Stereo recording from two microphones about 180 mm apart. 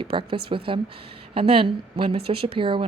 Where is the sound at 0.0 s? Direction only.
30° right (ahead or behind).